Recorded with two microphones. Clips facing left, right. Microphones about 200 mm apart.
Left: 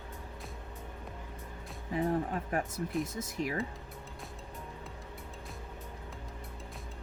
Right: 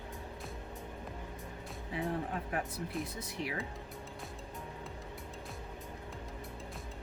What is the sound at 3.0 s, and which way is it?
Speech, 45° left (ahead or behind).